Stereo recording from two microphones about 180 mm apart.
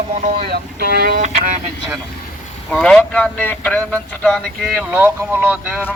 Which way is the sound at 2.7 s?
5° left (ahead or behind).